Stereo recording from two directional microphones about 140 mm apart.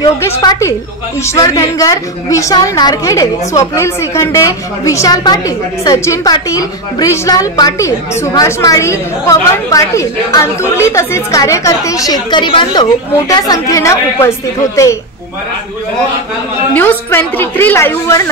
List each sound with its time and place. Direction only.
0.4 s a woman's voice: 25° left (ahead or behind)
16.7 s a woman's voice: 10° left (ahead or behind)